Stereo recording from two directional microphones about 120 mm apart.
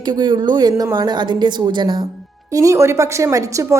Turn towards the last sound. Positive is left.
turn(degrees=-25)  # may be behind; listen again after turning